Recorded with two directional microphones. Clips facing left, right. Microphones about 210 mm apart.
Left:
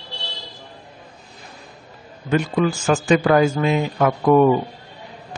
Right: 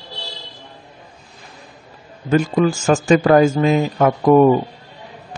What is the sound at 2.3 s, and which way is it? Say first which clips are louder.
A man's voice: right 3 dB; 45° right (ahead or behind).